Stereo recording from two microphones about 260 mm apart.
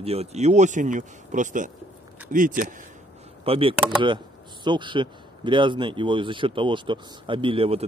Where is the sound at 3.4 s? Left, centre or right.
Right.